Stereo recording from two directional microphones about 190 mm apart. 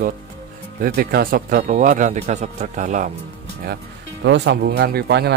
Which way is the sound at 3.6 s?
60° right (ahead or behind).